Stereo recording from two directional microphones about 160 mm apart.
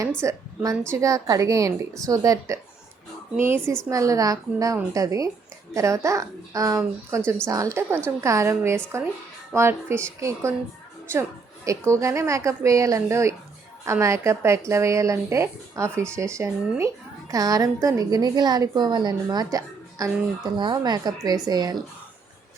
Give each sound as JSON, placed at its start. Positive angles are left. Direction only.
{"t": 0.2, "sound": "a woman's voice", "side_deg": -20}